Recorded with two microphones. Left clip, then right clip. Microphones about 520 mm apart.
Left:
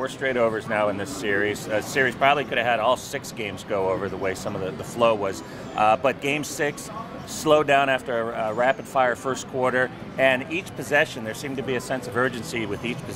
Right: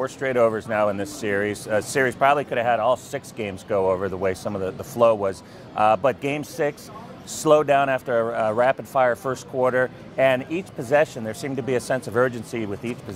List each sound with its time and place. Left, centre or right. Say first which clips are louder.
0.0 s speech: right 2 dB; right